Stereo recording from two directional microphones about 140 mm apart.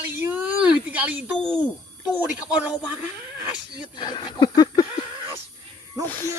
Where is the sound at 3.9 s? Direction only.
30° left (ahead or behind).